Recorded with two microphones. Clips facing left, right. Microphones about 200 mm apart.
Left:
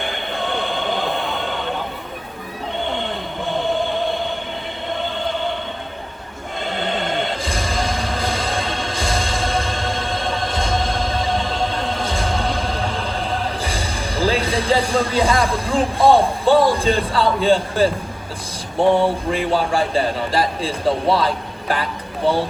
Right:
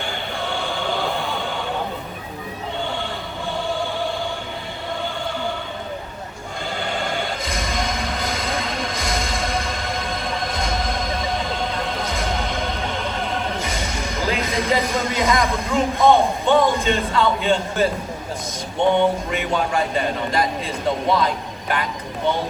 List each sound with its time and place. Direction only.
0.0 s a sound: 20° left (ahead or behind)
3.5 s choir: 20° left (ahead or behind)
6.7 s music: 20° left (ahead or behind)
18.8 s speech: 30° left (ahead or behind)